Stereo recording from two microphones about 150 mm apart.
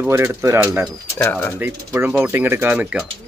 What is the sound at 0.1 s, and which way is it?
Speech, 20° right (ahead or behind).